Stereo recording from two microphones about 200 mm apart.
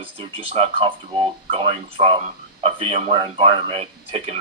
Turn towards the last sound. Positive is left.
turn(degrees=-30)  # may be behind; listen again after turning